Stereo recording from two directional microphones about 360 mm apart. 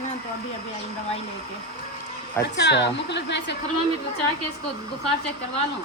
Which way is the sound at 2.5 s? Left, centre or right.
Left.